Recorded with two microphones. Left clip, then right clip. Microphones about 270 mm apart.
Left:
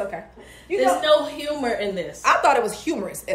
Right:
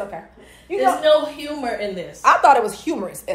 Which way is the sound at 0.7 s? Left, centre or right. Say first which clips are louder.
Even; centre.